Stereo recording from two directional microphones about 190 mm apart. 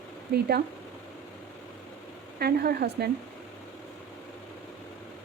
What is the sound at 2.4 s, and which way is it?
Speech, 55° right (ahead or behind).